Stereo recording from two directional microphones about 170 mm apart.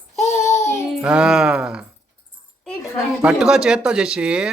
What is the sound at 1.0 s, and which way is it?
Speech, 5° right (ahead or behind).